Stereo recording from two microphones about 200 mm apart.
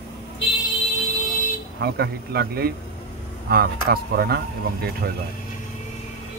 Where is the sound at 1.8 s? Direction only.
55° right (ahead or behind).